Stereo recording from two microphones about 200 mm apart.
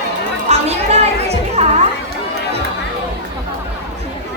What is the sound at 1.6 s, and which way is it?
Music, 35° right (ahead or behind).